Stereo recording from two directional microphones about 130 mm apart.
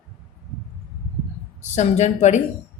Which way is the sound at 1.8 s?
60° left (ahead or behind).